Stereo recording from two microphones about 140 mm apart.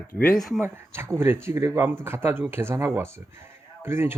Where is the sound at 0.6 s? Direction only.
15° right (ahead or behind).